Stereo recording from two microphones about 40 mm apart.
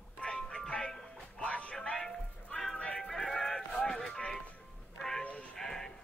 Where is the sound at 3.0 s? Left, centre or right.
Centre.